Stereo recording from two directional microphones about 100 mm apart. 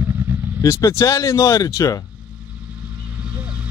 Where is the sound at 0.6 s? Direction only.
30° left (ahead or behind).